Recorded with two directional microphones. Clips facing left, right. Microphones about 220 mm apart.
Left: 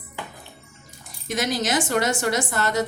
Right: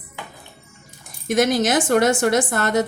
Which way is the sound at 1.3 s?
50° right (ahead or behind).